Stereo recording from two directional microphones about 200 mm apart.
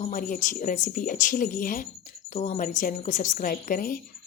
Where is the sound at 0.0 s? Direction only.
40° left (ahead or behind).